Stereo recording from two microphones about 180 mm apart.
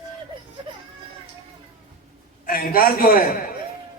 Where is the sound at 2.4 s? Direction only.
55° left (ahead or behind).